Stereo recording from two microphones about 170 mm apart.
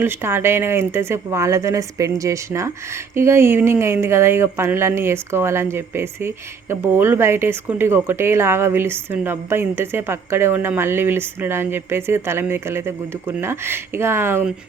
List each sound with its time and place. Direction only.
0.0 s speech: 15° right (ahead or behind)